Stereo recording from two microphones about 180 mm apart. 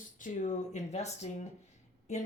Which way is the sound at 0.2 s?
45° left (ahead or behind).